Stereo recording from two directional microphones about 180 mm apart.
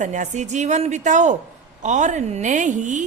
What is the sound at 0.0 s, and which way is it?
A woman's voice, 40° right (ahead or behind).